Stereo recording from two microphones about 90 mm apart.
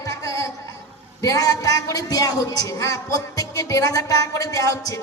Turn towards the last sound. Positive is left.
turn(degrees=40)  # may be behind; listen again after turning